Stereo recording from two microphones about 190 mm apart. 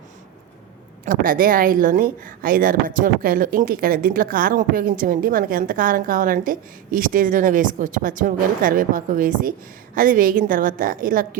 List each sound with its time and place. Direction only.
1.0 s speech: 45° right (ahead or behind)